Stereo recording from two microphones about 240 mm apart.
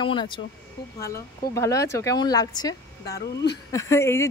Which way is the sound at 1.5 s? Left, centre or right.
Centre.